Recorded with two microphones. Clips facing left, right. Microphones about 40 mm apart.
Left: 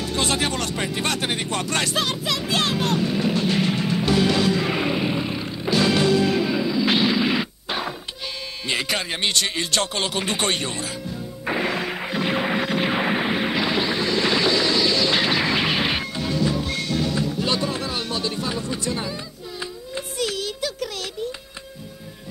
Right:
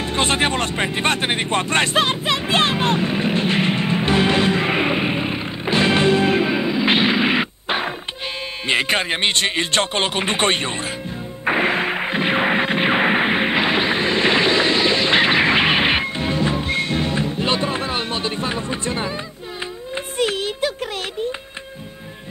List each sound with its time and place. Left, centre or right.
0.0 s vehicle: right
8.6 s speech: right
11.4 s a sound: right
20.2 s music: right